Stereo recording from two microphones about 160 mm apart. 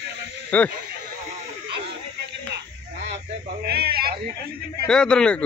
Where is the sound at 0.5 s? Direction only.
10° left (ahead or behind).